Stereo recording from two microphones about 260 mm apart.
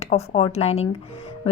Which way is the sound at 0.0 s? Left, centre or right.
Left.